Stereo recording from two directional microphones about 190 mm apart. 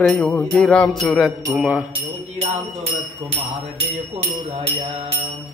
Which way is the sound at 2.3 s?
35° right (ahead or behind).